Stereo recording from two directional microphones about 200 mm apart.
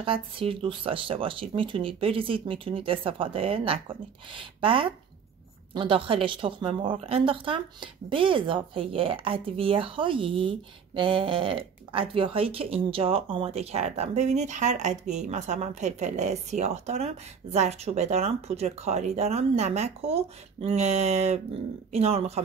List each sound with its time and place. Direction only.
0.0 s a woman's voice: 25° right (ahead or behind)